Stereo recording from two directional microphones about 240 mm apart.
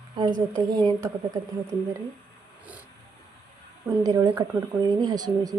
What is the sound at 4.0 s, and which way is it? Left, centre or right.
A woman's voice, centre.